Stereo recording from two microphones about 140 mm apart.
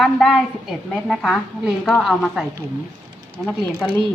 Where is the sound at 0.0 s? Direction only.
Centre (ahead or behind).